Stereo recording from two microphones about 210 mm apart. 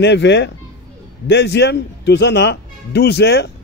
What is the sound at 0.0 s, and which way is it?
A man's voice, 55° left (ahead or behind).